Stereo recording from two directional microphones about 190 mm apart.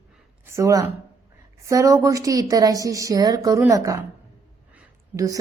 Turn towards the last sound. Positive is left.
turn(degrees=-5)  # may be behind; listen again after turning